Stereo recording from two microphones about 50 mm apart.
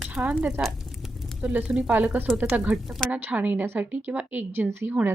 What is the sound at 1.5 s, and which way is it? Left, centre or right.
Speech, right.